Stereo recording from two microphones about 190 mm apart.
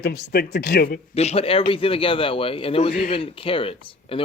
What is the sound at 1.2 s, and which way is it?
A man's voice, 35° left (ahead or behind).